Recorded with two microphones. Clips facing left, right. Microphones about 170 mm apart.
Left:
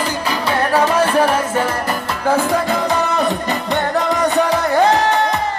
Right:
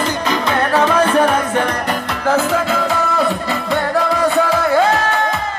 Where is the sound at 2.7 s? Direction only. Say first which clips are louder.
Even; 20° left (ahead or behind).